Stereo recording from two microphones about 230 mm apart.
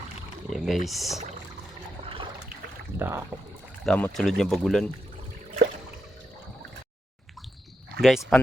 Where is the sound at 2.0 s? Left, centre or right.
Right.